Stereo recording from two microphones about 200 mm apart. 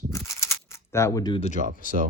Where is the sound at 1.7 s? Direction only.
45° right (ahead or behind).